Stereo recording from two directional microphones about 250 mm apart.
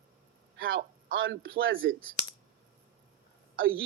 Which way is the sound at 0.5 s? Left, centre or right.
Right.